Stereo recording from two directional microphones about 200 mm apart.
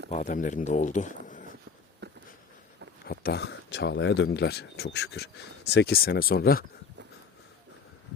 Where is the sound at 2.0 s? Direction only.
60° right (ahead or behind).